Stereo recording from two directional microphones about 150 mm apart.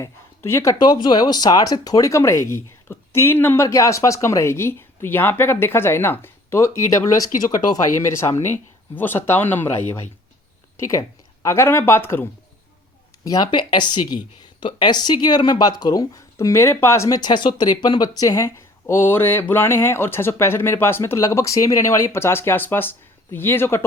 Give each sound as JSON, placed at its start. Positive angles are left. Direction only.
{"t": 0.0, "sound": "speech", "side_deg": 20}
{"t": 9.0, "sound": "speech", "side_deg": 15}
{"t": 11.4, "sound": "speech", "side_deg": 15}
{"t": 13.2, "sound": "speech", "side_deg": 25}